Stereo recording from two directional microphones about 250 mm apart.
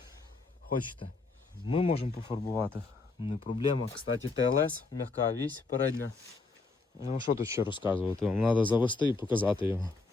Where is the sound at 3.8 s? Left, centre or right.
Left.